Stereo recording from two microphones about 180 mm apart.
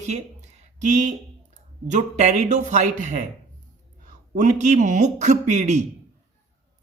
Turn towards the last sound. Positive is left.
turn(degrees=-40)  # may be behind; listen again after turning